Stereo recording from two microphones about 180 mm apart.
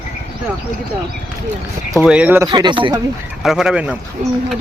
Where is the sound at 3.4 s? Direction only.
Centre (ahead or behind).